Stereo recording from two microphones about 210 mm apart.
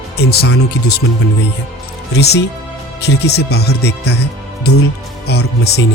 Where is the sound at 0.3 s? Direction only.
50° left (ahead or behind).